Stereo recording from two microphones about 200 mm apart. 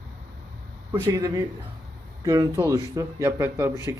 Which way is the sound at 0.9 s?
15° right (ahead or behind).